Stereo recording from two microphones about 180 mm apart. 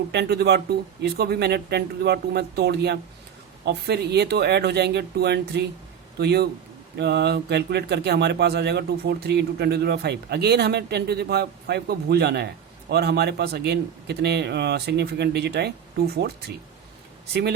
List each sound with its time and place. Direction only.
0.1 s speech: 65° right (ahead or behind)